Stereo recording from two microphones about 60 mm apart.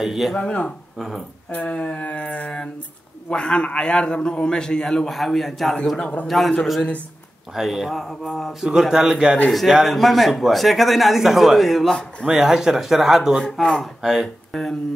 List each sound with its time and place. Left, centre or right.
0.0 s a man's voice: centre
0.4 s a man's voice: centre
0.9 s a man's voice: centre
1.5 s a sound: left
3.3 s a man's voice: centre
7.5 s a man's voice: centre
8.6 s a man's voice: centre
12.3 s a man's voice: centre
13.4 s a man's voice: centre
14.0 s a man's voice: centre
14.5 s speech: centre